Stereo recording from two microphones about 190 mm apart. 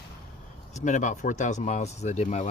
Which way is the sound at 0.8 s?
40° left (ahead or behind).